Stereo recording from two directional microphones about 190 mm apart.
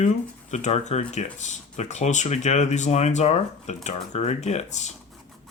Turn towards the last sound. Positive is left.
turn(degrees=40)  # may be behind; listen again after turning